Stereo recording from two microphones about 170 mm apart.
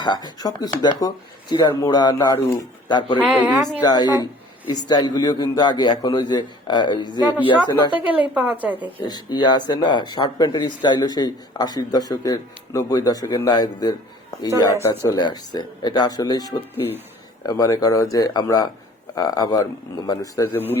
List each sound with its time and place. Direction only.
0.0 s speech: 25° left (ahead or behind)
3.2 s speech: 5° right (ahead or behind)
3.8 s speech: 25° left (ahead or behind)
7.9 s a woman's voice: 10° right (ahead or behind)
9.0 s speech: 25° left (ahead or behind)